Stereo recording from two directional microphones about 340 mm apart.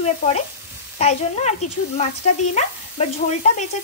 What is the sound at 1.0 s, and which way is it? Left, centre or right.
Speech, centre.